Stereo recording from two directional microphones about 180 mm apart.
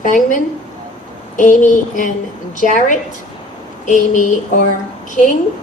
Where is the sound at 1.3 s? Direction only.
45° left (ahead or behind).